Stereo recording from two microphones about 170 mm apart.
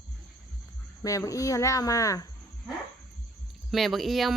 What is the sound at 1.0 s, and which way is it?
Speech, 20° left (ahead or behind).